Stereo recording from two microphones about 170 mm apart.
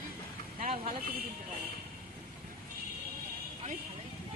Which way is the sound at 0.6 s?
40° right (ahead or behind).